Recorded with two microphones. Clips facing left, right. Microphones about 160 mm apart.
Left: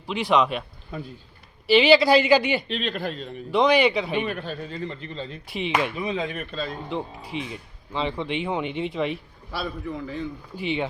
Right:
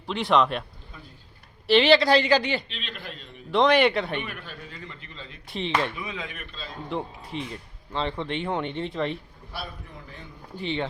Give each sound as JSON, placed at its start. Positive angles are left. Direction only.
{"t": 0.1, "sound": "speech", "side_deg": 0}
{"t": 1.6, "sound": "speech", "side_deg": 5}
{"t": 2.6, "sound": "speech", "side_deg": 45}
{"t": 3.5, "sound": "speech", "side_deg": 0}
{"t": 4.2, "sound": "speech", "side_deg": 30}
{"t": 5.5, "sound": "speech", "side_deg": 10}
{"t": 6.0, "sound": "speech", "side_deg": 30}
{"t": 6.9, "sound": "speech", "side_deg": 5}
{"t": 9.5, "sound": "a man's voice", "side_deg": 90}
{"t": 10.6, "sound": "speech", "side_deg": 10}